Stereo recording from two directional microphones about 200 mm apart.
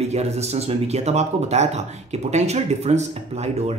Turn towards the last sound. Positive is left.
turn(degrees=-35)  # may be behind; listen again after turning